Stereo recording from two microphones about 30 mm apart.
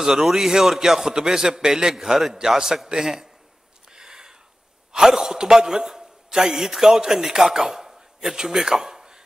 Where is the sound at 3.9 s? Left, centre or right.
Right.